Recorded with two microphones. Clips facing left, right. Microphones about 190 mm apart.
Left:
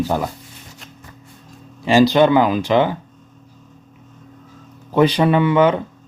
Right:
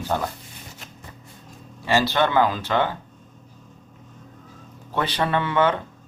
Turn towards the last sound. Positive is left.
turn(degrees=15)  # may be behind; listen again after turning